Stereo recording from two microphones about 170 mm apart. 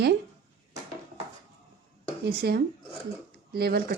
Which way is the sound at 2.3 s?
65° right (ahead or behind).